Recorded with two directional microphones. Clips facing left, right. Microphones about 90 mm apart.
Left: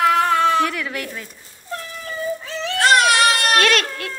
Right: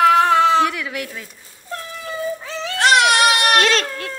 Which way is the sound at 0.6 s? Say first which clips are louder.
Right 2 dB; 15° right (ahead or behind).